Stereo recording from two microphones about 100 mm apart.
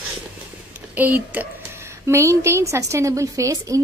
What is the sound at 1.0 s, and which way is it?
Speech, 15° right (ahead or behind).